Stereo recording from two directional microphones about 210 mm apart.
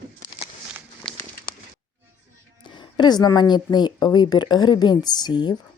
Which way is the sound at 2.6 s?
20° left (ahead or behind).